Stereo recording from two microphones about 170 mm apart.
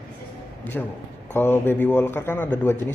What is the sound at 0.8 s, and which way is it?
A man's voice, 5° left (ahead or behind).